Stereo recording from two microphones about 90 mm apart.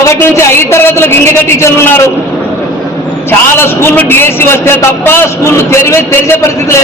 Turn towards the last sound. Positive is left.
turn(degrees=30)  # may be behind; listen again after turning